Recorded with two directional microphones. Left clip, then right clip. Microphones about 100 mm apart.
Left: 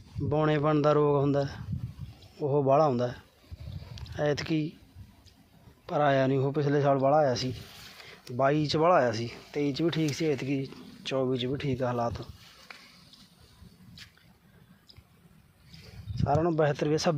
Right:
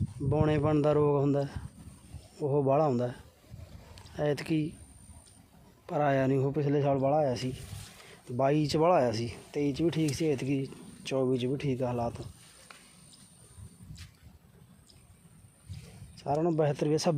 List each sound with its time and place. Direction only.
0.3 s a man's voice: 5° right (ahead or behind)
5.8 s a man's voice: 15° right (ahead or behind)
8.4 s speech: 30° right (ahead or behind); by 12.2 s 15° right (ahead or behind)
16.3 s speech: centre (ahead or behind)
16.6 s speech: 15° right (ahead or behind)